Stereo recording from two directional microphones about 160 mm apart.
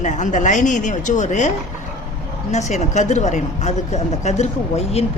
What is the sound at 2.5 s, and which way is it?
A woman's voice, 45° left (ahead or behind).